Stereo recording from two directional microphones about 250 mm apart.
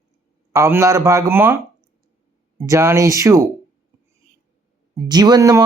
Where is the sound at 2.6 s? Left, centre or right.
Centre.